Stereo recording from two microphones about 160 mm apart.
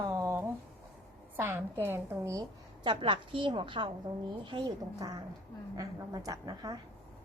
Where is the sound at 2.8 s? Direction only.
30° right (ahead or behind).